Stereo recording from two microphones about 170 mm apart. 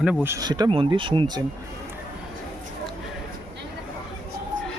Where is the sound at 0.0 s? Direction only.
10° right (ahead or behind); by 1.5 s 25° right (ahead or behind).